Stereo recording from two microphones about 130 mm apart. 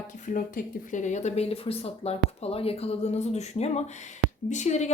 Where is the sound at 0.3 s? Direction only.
90° left.